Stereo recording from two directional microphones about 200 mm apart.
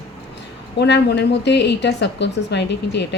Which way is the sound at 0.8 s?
55° left (ahead or behind).